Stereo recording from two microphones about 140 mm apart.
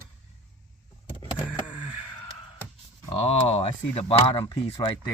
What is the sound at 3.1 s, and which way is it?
Speech, 45° left (ahead or behind).